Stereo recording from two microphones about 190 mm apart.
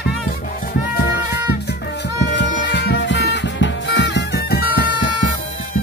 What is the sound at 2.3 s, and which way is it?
Music, 70° left (ahead or behind).